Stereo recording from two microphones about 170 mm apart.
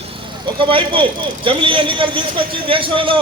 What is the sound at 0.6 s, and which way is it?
A man's voice, 30° right (ahead or behind).